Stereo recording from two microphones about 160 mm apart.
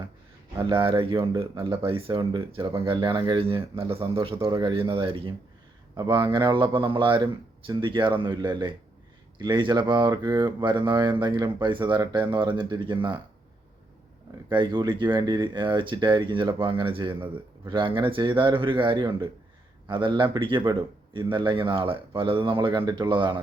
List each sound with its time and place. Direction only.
0.5 s a man's voice: 30° right (ahead or behind)
14.5 s a man's voice: 30° right (ahead or behind)